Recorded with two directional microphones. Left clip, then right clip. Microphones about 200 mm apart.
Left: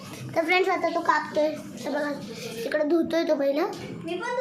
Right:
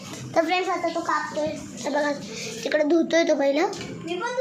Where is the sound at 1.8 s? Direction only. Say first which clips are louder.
Right 4 dB; 10° right (ahead or behind).